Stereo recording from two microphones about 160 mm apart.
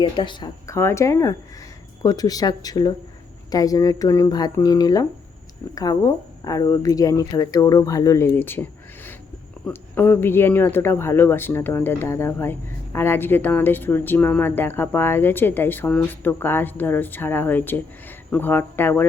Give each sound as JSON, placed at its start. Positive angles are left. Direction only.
{"t": 0.0, "sound": "speech", "side_deg": 30}
{"t": 0.8, "sound": "speech", "side_deg": 15}
{"t": 9.6, "sound": "speech", "side_deg": 15}